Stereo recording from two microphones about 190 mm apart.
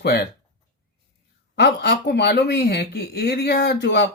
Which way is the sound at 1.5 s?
60° left (ahead or behind).